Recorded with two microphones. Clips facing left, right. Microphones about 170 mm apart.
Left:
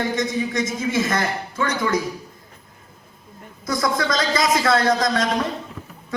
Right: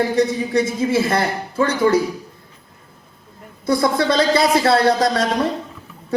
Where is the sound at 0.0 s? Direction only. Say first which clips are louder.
Right 5 dB; 35° right (ahead or behind).